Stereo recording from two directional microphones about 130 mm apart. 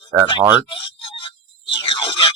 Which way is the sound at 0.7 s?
40° left (ahead or behind).